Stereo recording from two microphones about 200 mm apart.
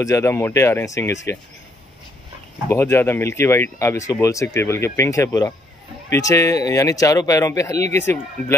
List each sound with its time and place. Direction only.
0.0 s speech: 15° left (ahead or behind)
2.7 s speech: 10° left (ahead or behind)